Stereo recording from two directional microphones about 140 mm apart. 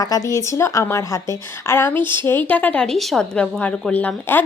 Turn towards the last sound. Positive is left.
turn(degrees=10)  # may be behind; listen again after turning